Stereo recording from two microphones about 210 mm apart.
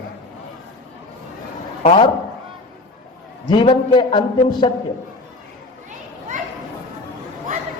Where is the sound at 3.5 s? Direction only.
25° left (ahead or behind).